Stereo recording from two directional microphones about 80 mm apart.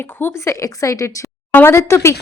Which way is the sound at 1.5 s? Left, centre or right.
Left.